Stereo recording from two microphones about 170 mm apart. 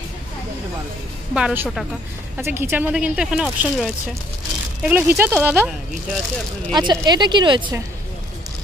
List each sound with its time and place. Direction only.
1.3 s speech: 10° right (ahead or behind)
4.8 s speech: 10° right (ahead or behind)
6.7 s speech: 25° right (ahead or behind)